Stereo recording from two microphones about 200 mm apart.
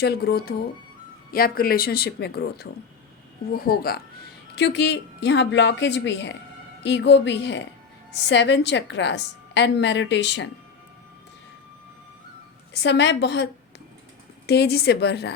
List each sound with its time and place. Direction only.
0.0 s speech: 50° left (ahead or behind)
4.5 s a woman's voice: 60° left (ahead or behind)
12.7 s a woman's voice: 60° left (ahead or behind)